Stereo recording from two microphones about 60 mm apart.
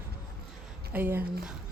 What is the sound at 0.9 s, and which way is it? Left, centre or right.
Speech, right.